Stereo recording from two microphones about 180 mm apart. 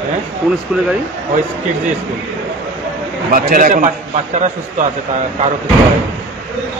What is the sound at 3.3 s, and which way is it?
Speech, 50° right (ahead or behind).